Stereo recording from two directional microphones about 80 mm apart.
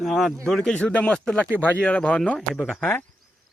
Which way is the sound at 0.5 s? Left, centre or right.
Centre.